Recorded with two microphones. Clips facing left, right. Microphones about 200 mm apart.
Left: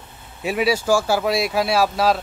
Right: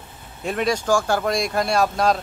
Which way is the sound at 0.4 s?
5° left (ahead or behind).